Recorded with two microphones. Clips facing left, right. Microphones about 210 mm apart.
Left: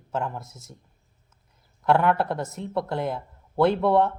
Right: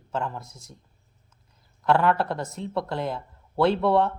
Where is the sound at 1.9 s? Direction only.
15° left (ahead or behind).